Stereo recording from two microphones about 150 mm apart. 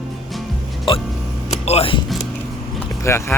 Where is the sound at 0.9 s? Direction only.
35° left (ahead or behind).